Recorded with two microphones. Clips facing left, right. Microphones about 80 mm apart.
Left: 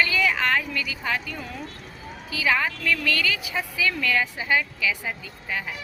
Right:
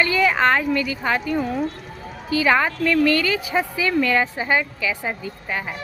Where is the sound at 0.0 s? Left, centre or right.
Right.